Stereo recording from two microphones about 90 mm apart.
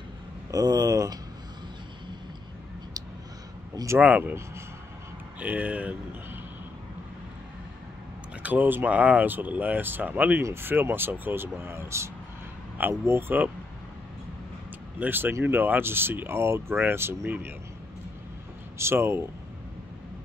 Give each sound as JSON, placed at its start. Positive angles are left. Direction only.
{"t": 0.5, "sound": "speech", "side_deg": -45}
{"t": 4.0, "sound": "speech", "side_deg": -20}
{"t": 5.4, "sound": "speech", "side_deg": -15}
{"t": 8.4, "sound": "speech", "side_deg": -15}
{"t": 15.0, "sound": "speech", "side_deg": -20}
{"t": 18.8, "sound": "speech", "side_deg": -25}